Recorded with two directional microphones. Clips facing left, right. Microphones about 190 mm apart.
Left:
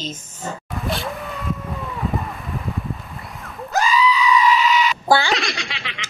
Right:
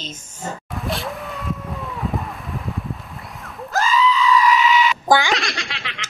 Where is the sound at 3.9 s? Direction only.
10° left (ahead or behind).